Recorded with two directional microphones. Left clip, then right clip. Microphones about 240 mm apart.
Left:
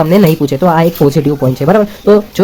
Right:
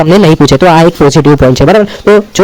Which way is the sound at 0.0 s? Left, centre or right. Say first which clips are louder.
Right 5 dB; right.